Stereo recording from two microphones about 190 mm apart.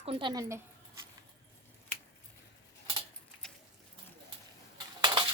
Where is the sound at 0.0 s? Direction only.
30° right (ahead or behind).